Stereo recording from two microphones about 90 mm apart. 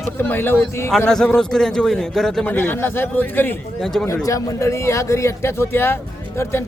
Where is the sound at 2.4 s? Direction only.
20° left (ahead or behind).